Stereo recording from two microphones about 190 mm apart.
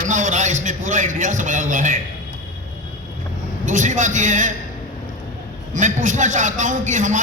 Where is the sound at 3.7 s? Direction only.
40° right (ahead or behind).